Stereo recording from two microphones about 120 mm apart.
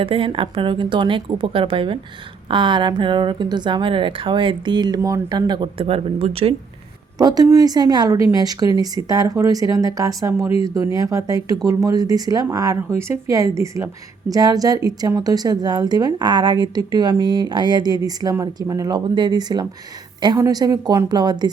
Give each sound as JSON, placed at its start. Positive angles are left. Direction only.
{"t": 0.0, "sound": "a woman's voice", "side_deg": -45}
{"t": 4.9, "sound": "speech", "side_deg": -25}
{"t": 5.3, "sound": "a woman's voice", "side_deg": -35}
{"t": 7.2, "sound": "a woman's voice", "side_deg": -30}